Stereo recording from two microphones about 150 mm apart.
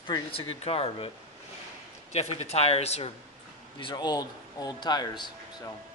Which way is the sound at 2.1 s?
45° left (ahead or behind).